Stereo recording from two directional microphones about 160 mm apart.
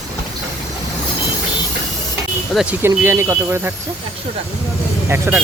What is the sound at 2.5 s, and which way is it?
Speech, 5° right (ahead or behind).